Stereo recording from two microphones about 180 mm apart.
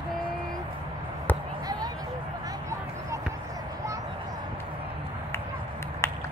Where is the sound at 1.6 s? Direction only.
20° right (ahead or behind).